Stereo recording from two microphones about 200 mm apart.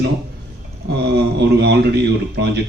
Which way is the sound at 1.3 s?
55° right (ahead or behind).